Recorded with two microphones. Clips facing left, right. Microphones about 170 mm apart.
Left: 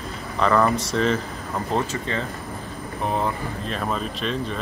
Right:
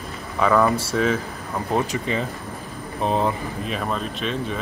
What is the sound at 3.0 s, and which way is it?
Speech, 20° right (ahead or behind).